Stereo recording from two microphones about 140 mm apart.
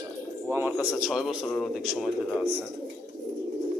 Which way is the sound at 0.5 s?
10° right (ahead or behind).